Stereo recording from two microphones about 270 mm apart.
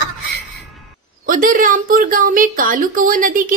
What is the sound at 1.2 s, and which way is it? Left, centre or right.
A woman's voice, right.